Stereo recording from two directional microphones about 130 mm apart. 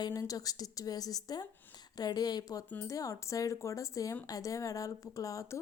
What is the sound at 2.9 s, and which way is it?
Speech, 25° left (ahead or behind).